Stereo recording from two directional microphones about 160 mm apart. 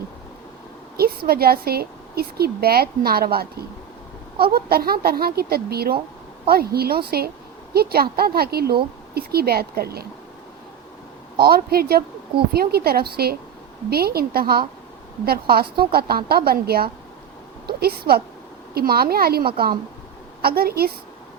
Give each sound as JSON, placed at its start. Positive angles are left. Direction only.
{"t": 0.9, "sound": "a woman's voice", "side_deg": -75}
{"t": 11.3, "sound": "a woman's voice", "side_deg": -70}